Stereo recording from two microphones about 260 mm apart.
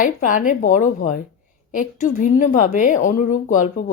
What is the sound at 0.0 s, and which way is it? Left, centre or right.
A woman's voice, left.